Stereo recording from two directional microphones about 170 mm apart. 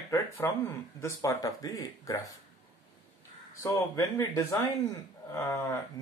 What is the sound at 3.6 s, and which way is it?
Speech, 20° left (ahead or behind).